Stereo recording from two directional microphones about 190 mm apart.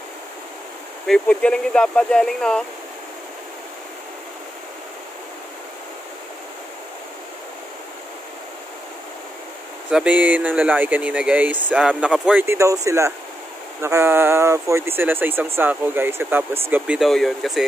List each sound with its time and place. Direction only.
1.0 s speech: 5° left (ahead or behind)
9.8 s speech: 5° right (ahead or behind)